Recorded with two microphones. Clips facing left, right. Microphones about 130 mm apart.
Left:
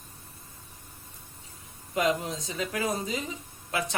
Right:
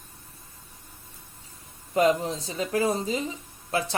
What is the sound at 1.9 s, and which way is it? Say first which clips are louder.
Speech: right 5 dB; 35° right (ahead or behind).